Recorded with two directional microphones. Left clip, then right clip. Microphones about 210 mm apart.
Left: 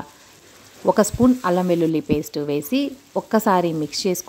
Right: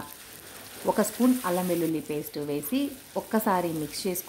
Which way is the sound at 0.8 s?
35° left (ahead or behind).